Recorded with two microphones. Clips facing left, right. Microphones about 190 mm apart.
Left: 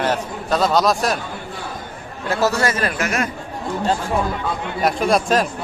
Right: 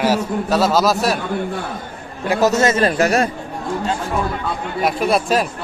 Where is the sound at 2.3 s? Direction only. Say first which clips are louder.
Right 4 dB; 20° right (ahead or behind); by 3.2 s 35° right (ahead or behind).